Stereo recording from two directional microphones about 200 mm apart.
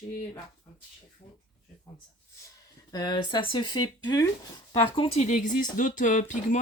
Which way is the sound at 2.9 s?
20° left (ahead or behind).